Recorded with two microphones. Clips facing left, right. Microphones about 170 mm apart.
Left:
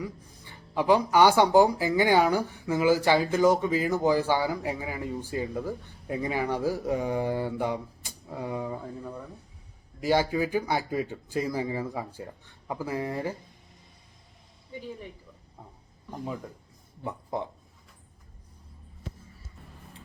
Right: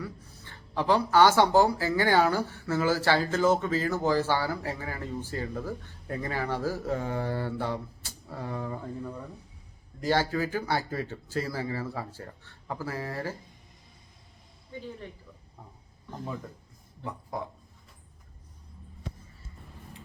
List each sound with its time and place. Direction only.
0.0 s speech: 15° left (ahead or behind)
14.7 s speech: 15° left (ahead or behind)